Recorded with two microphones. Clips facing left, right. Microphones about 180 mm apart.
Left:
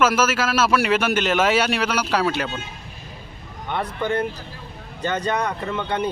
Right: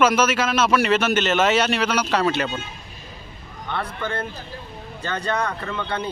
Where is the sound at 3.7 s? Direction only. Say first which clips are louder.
Left 4 dB; 15° left (ahead or behind).